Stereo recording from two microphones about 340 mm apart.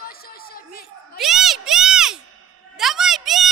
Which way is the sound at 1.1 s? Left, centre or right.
Centre.